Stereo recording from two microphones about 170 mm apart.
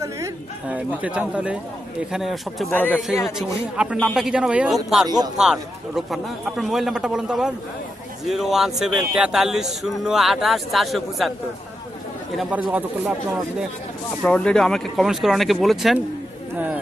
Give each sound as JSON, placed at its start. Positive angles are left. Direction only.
{"t": 0.7, "sound": "a man's voice", "side_deg": -10}
{"t": 3.2, "sound": "a man's voice", "side_deg": -5}
{"t": 5.0, "sound": "speech", "side_deg": -25}
{"t": 6.1, "sound": "a man's voice", "side_deg": 0}
{"t": 12.4, "sound": "a man's voice", "side_deg": -5}
{"t": 14.2, "sound": "a man's voice", "side_deg": 5}